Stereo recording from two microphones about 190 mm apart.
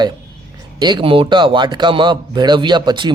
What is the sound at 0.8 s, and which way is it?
Speech, 25° right (ahead or behind).